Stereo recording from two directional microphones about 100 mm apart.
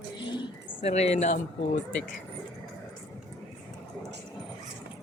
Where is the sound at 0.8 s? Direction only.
90° left.